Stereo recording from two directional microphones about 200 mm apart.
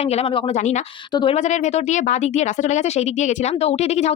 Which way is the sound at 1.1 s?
20° left (ahead or behind).